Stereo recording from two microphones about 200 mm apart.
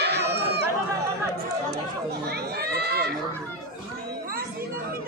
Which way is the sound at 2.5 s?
50° right (ahead or behind).